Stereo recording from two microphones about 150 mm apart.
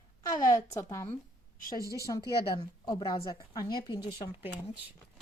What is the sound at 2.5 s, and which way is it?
A woman's voice, 30° left (ahead or behind).